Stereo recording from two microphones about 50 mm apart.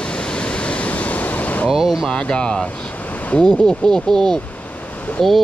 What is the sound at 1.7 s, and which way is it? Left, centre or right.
Speech, centre.